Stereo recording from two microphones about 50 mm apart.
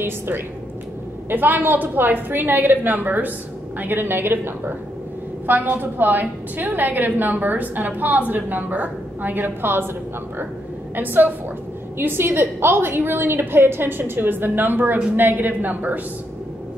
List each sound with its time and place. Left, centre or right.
1.3 s a woman's voice: right
5.5 s a woman's voice: right
11.0 s a woman's voice: right
12.0 s a woman's voice: right